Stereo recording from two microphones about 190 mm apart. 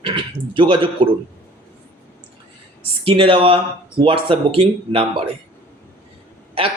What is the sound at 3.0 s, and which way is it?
Speech, 30° right (ahead or behind).